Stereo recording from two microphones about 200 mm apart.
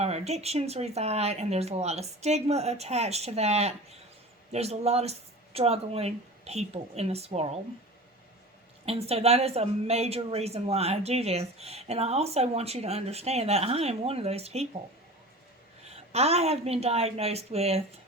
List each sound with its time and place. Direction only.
0.0 s speech: 35° right (ahead or behind)
8.9 s speech: 30° right (ahead or behind)
15.8 s speech: 30° right (ahead or behind)